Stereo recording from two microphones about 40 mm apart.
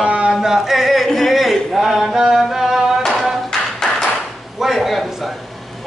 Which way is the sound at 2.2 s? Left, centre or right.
Centre.